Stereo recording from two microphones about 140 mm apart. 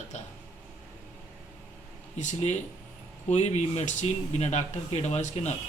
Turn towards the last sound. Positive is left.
turn(degrees=55)  # may be behind; listen again after turning